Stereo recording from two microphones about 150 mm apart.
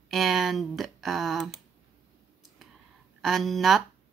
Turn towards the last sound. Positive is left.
turn(degrees=0)  # may be behind; listen again after turning